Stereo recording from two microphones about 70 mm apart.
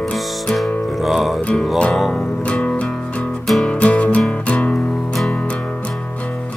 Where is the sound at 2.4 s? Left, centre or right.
Centre.